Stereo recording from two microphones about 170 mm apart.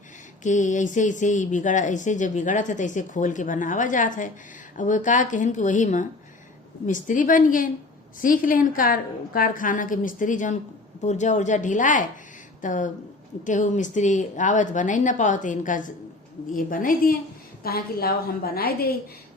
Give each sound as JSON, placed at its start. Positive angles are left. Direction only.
{"t": 0.4, "sound": "a woman's voice", "side_deg": 45}